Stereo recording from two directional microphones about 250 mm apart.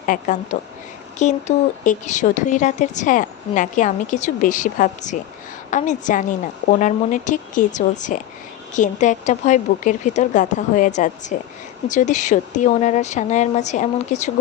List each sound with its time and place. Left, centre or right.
0.1 s a woman's voice: left